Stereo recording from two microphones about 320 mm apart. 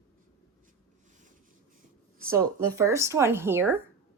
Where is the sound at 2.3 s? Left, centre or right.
Centre.